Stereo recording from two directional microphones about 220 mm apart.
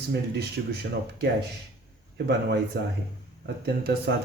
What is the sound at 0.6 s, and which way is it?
Speech, 45° right (ahead or behind).